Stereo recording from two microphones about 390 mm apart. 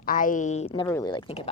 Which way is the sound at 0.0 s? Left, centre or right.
Left.